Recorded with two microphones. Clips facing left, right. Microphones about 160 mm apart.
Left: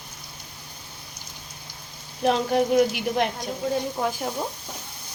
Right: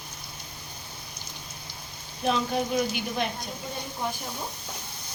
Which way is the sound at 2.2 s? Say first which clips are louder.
Left 5 dB; 65° left (ahead or behind).